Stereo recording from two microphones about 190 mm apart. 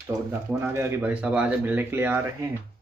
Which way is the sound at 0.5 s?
10° right (ahead or behind).